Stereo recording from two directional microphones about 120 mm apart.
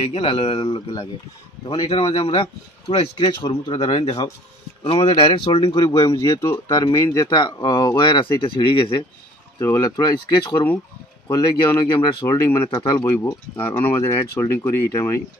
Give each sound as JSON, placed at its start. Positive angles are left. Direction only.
{"t": 0.0, "sound": "speech", "side_deg": 50}
{"t": 3.3, "sound": "speech", "side_deg": 40}
{"t": 5.9, "sound": "speech", "side_deg": 25}
{"t": 9.6, "sound": "speech", "side_deg": 25}
{"t": 11.6, "sound": "speech", "side_deg": 40}
{"t": 12.3, "sound": "speech", "side_deg": 25}